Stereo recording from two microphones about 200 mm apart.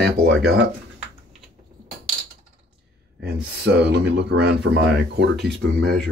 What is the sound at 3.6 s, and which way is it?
Speech, 55° right (ahead or behind).